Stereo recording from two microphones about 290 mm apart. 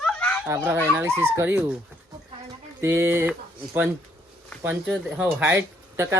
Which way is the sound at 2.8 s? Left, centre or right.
Centre.